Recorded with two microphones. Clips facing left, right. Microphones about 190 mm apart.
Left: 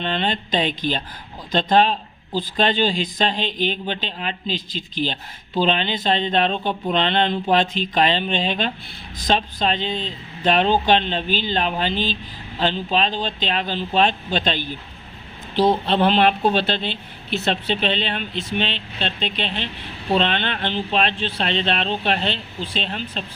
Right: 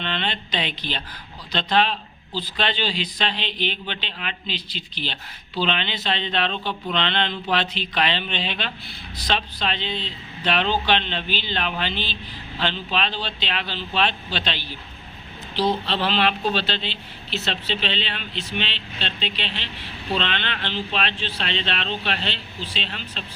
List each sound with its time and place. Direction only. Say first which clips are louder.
0.0 s speech: left 5 dB; 40° left (ahead or behind)